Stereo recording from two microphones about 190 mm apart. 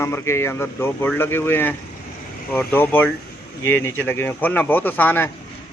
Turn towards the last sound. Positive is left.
turn(degrees=10)  # may be behind; listen again after turning